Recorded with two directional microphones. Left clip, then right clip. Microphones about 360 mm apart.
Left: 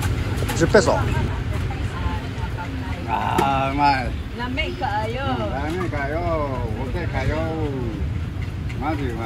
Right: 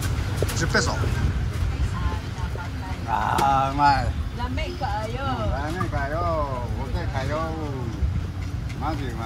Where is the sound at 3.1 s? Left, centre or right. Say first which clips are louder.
Even; centre.